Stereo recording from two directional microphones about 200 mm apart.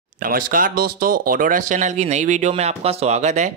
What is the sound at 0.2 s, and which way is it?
Speech, 45° right (ahead or behind).